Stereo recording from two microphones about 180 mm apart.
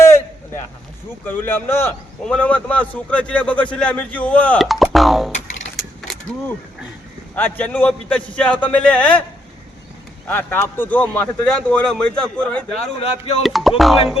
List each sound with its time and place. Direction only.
1.2 s a man's voice: 10° left (ahead or behind)
7.3 s a man's voice: 10° left (ahead or behind)
10.2 s a man's voice: 10° left (ahead or behind)
13.0 s a sound: 35° left (ahead or behind)
13.4 s a man's voice: centre (ahead or behind)